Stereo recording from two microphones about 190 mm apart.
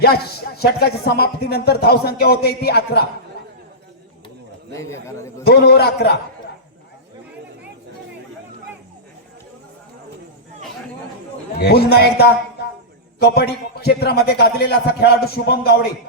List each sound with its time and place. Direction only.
0.0 s speech: 55° left (ahead or behind)
4.8 s a man's voice: 15° left (ahead or behind)
5.5 s speech: 55° left (ahead or behind)
11.5 s speech: 55° left (ahead or behind)